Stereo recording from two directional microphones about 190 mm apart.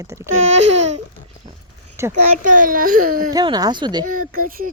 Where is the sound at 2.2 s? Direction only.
40° right (ahead or behind).